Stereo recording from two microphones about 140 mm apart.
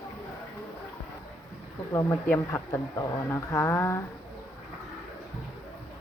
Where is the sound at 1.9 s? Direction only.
20° left (ahead or behind).